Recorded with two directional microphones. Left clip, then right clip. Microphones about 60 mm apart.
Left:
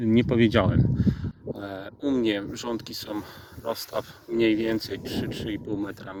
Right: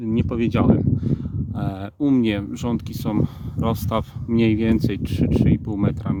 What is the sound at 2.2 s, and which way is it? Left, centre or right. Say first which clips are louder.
Speech: right 3 dB; right.